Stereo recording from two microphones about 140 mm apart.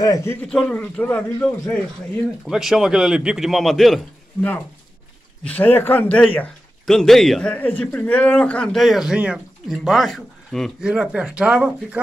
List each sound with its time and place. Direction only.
0.0 s speech: 20° left (ahead or behind)
0.4 s a man's voice: 5° left (ahead or behind)
2.4 s a man's voice: centre (ahead or behind)
5.4 s a man's voice: 10° left (ahead or behind); by 12.0 s 10° right (ahead or behind)